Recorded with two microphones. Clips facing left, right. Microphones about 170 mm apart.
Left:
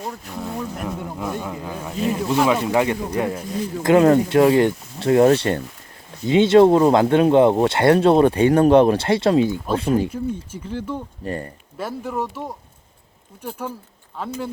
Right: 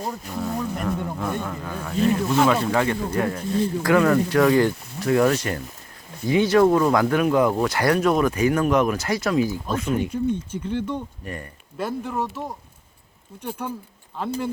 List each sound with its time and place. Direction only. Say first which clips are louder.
0.3 s speech: right 2 dB; centre (ahead or behind); by 3.4 s 15° left (ahead or behind)
3.8 s speech: left 6 dB; 25° left (ahead or behind)
10.1 s speech: right 2 dB; 5° left (ahead or behind)
11.2 s speech: left 7 dB; 30° left (ahead or behind)
11.8 s speech: even; 5° left (ahead or behind)
13.6 s speech: left 1 dB; 5° left (ahead or behind)